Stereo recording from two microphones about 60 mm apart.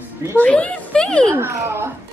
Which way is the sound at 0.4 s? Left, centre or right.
Left.